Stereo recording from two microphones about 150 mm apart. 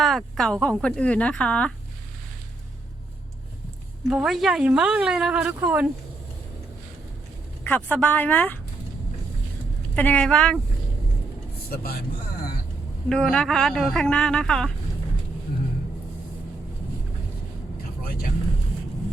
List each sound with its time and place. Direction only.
0.0 s speech: centre (ahead or behind)
4.1 s speech: centre (ahead or behind)
7.6 s speech: 10° left (ahead or behind)
9.9 s speech: 10° left (ahead or behind)
11.7 s speech: 80° left
13.1 s speech: 5° left (ahead or behind)
18.0 s vehicle: 80° left